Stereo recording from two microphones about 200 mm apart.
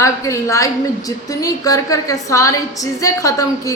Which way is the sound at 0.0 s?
15° left (ahead or behind).